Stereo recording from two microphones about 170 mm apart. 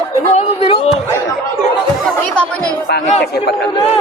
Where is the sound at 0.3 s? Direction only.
35° left (ahead or behind).